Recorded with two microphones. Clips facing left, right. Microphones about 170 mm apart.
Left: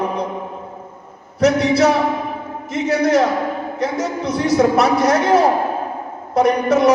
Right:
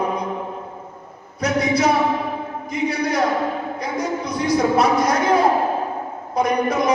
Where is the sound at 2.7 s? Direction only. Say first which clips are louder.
Left 6 dB; 75° left (ahead or behind).